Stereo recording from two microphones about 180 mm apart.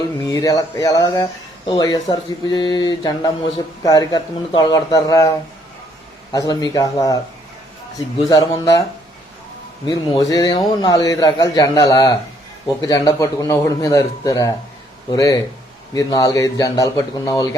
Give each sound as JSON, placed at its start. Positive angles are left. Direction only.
{"t": 0.3, "sound": "speech", "side_deg": 20}
{"t": 6.3, "sound": "speech", "side_deg": 20}
{"t": 9.8, "sound": "speech", "side_deg": 20}